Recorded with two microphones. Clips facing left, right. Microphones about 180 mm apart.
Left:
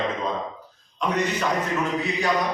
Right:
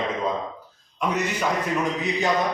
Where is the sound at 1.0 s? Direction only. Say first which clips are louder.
Even; 10° right (ahead or behind).